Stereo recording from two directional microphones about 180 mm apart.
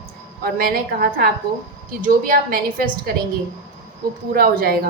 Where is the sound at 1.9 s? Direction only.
50° right (ahead or behind).